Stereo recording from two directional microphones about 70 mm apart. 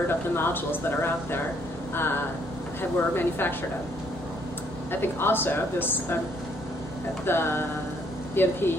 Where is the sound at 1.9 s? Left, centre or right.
Left.